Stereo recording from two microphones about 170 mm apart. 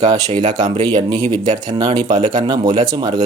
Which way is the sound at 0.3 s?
25° right (ahead or behind).